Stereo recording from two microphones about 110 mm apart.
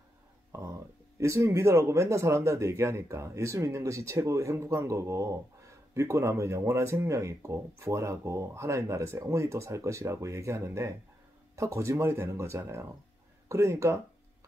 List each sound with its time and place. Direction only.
0.5 s speech: 30° right (ahead or behind)